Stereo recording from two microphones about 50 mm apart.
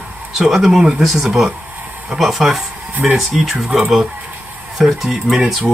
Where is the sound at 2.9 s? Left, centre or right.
Right.